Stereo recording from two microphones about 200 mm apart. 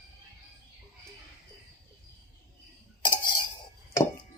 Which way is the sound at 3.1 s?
25° left (ahead or behind).